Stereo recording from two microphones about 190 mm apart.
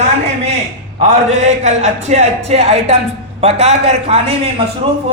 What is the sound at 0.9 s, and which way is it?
A man's voice, 35° right (ahead or behind).